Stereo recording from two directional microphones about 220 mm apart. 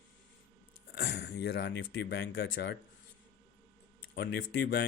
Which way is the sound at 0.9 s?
50° left (ahead or behind).